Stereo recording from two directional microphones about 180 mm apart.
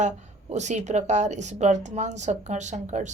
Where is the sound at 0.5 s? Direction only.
40° right (ahead or behind).